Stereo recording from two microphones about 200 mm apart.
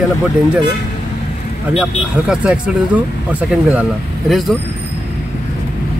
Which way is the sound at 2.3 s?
5° right (ahead or behind).